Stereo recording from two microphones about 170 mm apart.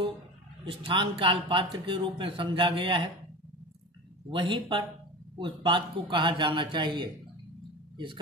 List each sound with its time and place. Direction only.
0.7 s a man's voice: 30° right (ahead or behind)
4.3 s a man's voice: 30° right (ahead or behind)